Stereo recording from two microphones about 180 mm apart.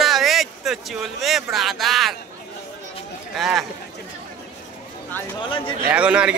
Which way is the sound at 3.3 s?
Centre (ahead or behind).